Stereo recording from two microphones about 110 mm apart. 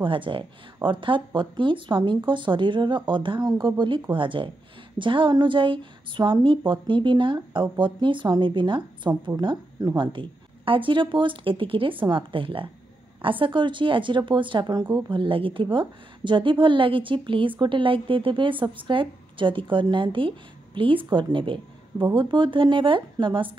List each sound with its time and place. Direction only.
0.0 s a woman's voice: 50° right (ahead or behind)
9.8 s speech: 35° right (ahead or behind)
10.1 s a woman's voice: 50° right (ahead or behind)